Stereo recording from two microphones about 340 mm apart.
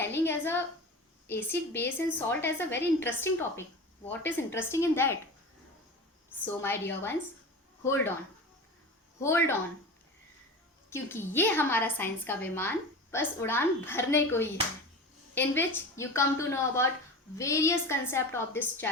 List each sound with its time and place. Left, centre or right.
0.0 s a sound: centre
1.3 s a woman's voice: centre
6.4 s a woman's voice: centre
9.2 s a woman's voice: centre
10.8 s a woman's voice: centre